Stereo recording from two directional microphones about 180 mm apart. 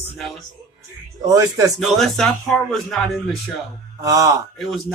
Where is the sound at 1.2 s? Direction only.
20° right (ahead or behind).